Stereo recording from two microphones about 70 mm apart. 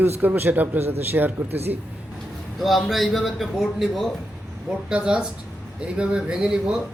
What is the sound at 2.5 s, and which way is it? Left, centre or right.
A man's voice, centre.